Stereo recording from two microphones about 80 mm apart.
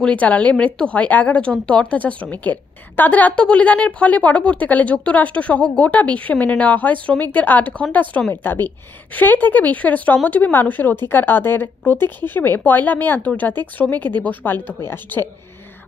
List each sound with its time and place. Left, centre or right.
0.0 s a woman's voice: centre